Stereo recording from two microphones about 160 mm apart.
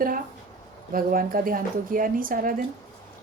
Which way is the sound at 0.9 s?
65° right (ahead or behind).